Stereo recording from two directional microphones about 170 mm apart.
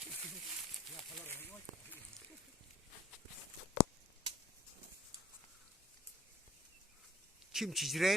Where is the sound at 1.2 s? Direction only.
10° left (ahead or behind).